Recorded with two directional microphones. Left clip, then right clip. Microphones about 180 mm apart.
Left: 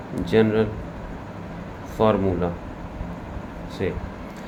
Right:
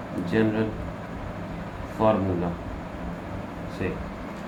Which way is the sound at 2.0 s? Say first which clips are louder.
Left 2 dB; 75° left (ahead or behind).